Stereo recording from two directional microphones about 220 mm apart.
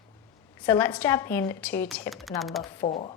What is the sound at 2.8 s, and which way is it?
Speech, 25° left (ahead or behind).